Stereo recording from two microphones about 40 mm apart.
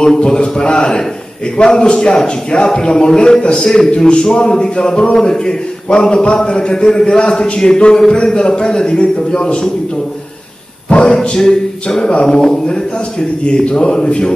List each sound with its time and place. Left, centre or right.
0.2 s a man's voice: left
10.9 s a sound: left
11.1 s a man's voice: centre